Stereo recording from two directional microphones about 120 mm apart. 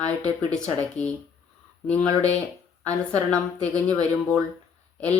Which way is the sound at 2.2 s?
10° left (ahead or behind).